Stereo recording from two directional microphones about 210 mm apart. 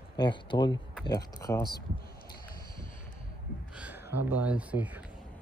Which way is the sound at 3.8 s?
5° right (ahead or behind).